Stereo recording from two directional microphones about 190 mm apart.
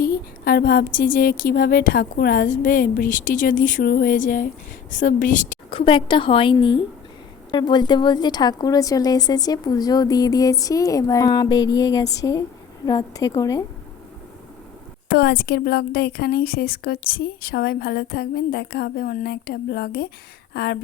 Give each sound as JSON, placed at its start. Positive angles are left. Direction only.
{"t": 0.0, "sound": "speech", "side_deg": 50}
{"t": 5.7, "sound": "a woman's voice", "side_deg": 25}
{"t": 15.1, "sound": "a woman's voice", "side_deg": 55}